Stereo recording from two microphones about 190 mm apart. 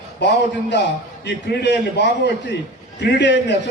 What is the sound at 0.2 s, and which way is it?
A man's voice, 65° left (ahead or behind).